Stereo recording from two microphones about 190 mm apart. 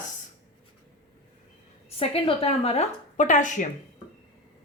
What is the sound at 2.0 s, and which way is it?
Speech, 30° left (ahead or behind).